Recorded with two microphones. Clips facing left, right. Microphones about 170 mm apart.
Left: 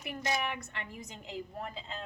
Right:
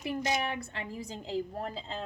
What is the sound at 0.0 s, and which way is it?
A woman's voice, 30° right (ahead or behind).